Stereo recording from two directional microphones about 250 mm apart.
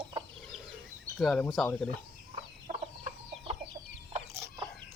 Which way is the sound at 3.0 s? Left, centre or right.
Right.